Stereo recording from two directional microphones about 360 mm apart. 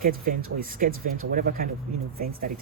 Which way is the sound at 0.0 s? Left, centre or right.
Right.